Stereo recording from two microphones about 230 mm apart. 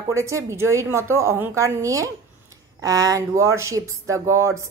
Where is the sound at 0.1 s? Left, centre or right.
Centre.